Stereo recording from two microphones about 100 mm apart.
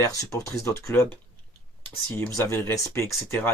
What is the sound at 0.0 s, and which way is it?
Speech, 30° left (ahead or behind).